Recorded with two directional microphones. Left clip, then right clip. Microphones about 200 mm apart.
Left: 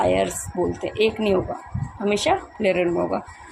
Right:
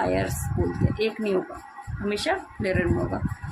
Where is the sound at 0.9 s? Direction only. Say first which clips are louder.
Left 6 dB; 20° left (ahead or behind).